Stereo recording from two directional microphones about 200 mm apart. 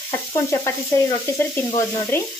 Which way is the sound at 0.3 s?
15° left (ahead or behind).